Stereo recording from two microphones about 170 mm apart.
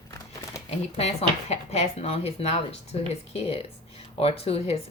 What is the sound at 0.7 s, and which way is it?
Speech, 40° left (ahead or behind).